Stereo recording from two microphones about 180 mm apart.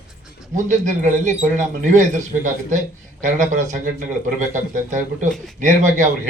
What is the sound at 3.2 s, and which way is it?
A man's voice, 45° right (ahead or behind).